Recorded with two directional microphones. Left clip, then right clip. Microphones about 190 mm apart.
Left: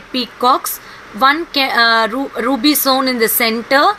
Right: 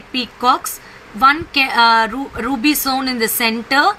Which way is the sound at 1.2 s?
10° right (ahead or behind).